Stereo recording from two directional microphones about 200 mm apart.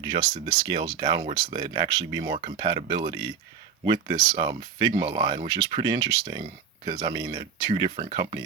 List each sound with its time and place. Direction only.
0.0 s speech: 20° right (ahead or behind)